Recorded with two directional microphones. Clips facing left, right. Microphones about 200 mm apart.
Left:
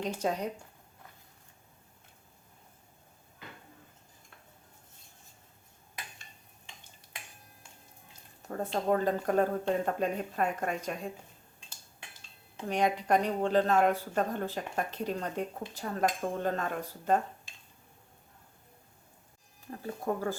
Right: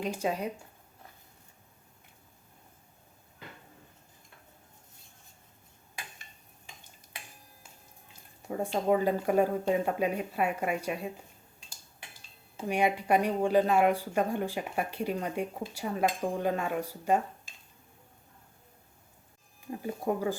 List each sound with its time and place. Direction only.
0.0 s speech: 10° right (ahead or behind)
8.4 s speech: 10° right (ahead or behind)
12.5 s speech: 10° right (ahead or behind)
19.7 s speech: 15° right (ahead or behind)